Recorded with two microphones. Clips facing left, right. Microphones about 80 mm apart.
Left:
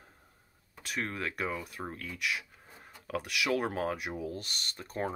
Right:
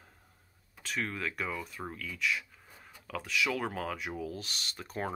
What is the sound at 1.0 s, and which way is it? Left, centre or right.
Speech, left.